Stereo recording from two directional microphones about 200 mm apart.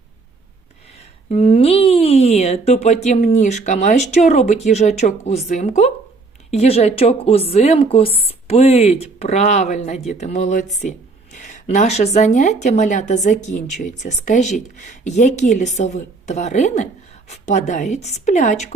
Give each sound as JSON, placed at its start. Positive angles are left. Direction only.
{"t": 1.3, "sound": "speech", "side_deg": 30}